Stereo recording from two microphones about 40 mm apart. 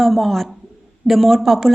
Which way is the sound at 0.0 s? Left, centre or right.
Centre.